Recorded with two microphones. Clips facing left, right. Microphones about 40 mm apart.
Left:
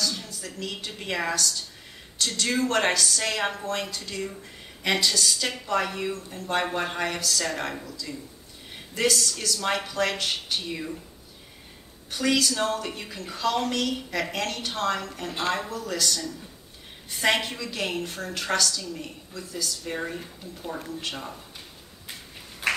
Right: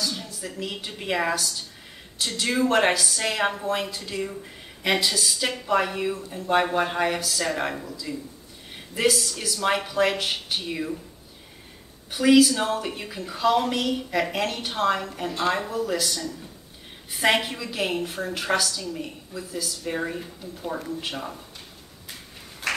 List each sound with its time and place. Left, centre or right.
0.0 s a woman's voice: centre
12.1 s a woman's voice: centre
22.6 s a sound: left